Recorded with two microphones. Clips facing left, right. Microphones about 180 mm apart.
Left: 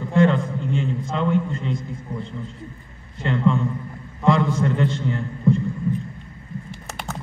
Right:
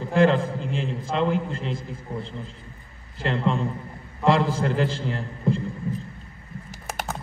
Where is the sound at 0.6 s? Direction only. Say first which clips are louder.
Left 4 dB; 90° right.